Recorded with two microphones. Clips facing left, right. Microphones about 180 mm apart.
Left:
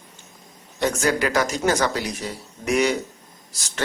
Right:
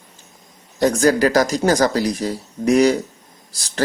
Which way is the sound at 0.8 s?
35° right (ahead or behind).